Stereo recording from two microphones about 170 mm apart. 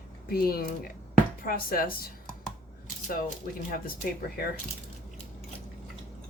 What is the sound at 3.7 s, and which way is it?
Speech, 60° left (ahead or behind).